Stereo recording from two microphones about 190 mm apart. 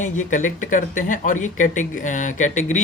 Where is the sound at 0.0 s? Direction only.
40° left (ahead or behind).